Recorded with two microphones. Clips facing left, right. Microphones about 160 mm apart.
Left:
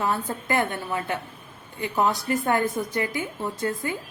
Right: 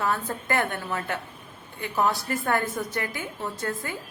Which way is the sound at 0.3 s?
10° left (ahead or behind).